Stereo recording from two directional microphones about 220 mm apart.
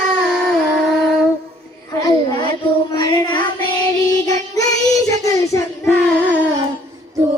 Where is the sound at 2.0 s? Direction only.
20° left (ahead or behind).